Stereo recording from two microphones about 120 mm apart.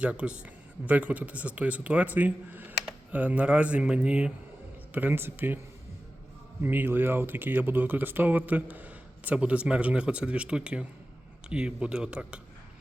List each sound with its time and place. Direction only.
0.0 s speech: 10° right (ahead or behind)
6.6 s speech: 15° right (ahead or behind)